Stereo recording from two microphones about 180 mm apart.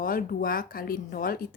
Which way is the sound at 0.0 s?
55° left (ahead or behind).